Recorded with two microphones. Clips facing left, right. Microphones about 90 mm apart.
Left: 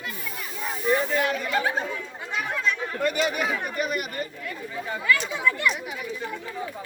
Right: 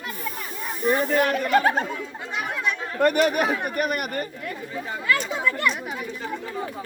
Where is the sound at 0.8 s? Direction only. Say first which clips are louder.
Right 3 dB; 50° right (ahead or behind).